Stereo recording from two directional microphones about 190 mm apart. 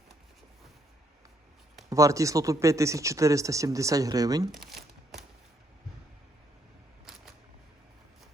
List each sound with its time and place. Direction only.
1.9 s speech: 15° right (ahead or behind)
7.0 s camera: centre (ahead or behind)